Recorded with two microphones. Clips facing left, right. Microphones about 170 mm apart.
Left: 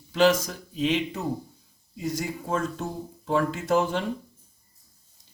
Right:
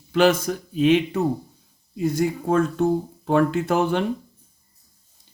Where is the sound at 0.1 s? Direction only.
55° right (ahead or behind).